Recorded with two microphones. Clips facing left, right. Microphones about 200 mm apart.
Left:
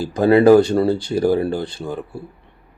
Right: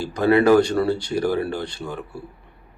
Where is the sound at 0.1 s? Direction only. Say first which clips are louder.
Left 4 dB; 30° left (ahead or behind).